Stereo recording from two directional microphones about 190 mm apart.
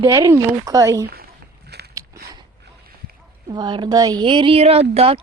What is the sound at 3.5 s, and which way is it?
A woman's voice, 25° right (ahead or behind).